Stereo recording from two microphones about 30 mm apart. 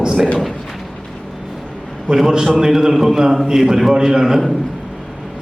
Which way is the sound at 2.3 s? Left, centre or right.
Right.